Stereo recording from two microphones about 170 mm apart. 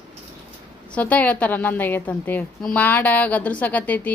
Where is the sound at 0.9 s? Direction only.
10° left (ahead or behind).